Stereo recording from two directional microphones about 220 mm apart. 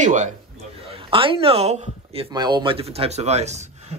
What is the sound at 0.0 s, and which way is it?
Speech, 35° right (ahead or behind).